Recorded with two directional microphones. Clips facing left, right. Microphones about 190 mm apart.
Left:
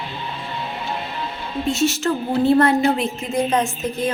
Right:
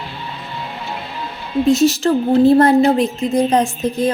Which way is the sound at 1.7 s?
35° right (ahead or behind).